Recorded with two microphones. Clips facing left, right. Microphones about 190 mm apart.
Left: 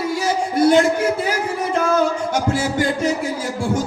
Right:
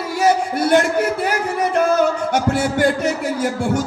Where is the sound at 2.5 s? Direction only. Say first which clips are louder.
Right 3 dB; 60° right (ahead or behind).